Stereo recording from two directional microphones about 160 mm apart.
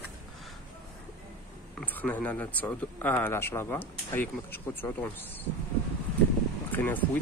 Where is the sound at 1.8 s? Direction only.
10° left (ahead or behind).